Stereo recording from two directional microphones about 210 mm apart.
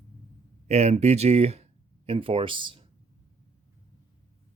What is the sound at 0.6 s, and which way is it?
Speech, 30° right (ahead or behind).